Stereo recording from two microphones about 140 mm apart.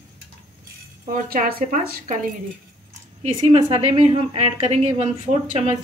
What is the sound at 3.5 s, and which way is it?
A woman's voice, 50° right (ahead or behind).